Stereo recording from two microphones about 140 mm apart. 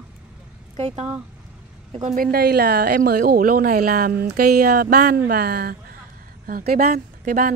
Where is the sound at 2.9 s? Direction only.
90° right; by 7.5 s 70° right (ahead or behind).